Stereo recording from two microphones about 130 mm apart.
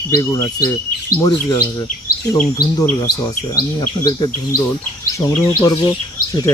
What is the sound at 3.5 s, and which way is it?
Speech, 30° left (ahead or behind).